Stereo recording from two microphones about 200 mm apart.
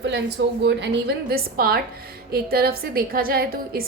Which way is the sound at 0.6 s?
55° right (ahead or behind).